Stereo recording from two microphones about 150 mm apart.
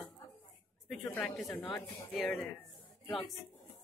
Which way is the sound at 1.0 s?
10° left (ahead or behind).